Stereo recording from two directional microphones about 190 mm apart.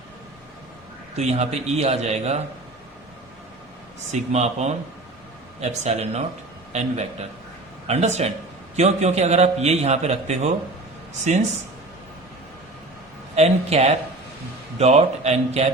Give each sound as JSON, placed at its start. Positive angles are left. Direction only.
{"t": 1.1, "sound": "a man's voice", "side_deg": -35}
{"t": 4.1, "sound": "a man's voice", "side_deg": -35}
{"t": 13.3, "sound": "a man's voice", "side_deg": -35}